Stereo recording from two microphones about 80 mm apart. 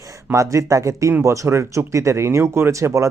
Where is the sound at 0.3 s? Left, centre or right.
Right.